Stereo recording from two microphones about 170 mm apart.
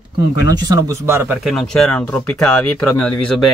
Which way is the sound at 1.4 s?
5° left (ahead or behind).